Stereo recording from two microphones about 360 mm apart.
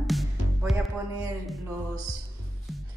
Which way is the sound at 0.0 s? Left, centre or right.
Centre.